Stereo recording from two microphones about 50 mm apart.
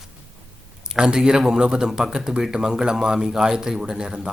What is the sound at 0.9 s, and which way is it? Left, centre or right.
Speech, centre.